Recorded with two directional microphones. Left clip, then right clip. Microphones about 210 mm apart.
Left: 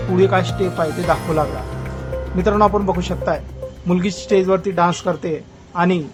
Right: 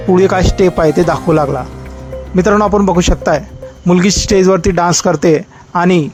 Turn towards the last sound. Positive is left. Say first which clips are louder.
# right 7 dB
turn(degrees=-30)  # may be behind; listen again after turning